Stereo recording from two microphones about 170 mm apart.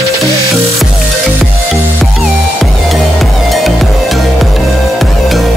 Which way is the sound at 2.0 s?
Centre (ahead or behind).